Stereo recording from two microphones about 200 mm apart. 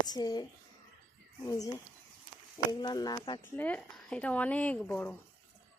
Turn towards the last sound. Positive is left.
turn(degrees=5)  # may be behind; listen again after turning